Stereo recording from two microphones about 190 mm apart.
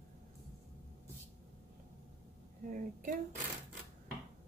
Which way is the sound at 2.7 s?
45° right (ahead or behind).